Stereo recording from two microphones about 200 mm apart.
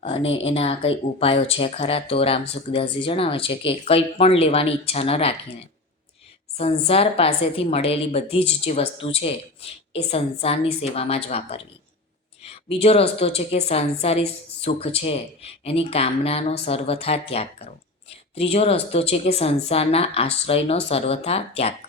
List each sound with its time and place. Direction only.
0.3 s a woman's voice: 30° left (ahead or behind)
6.6 s a woman's voice: 30° left (ahead or behind)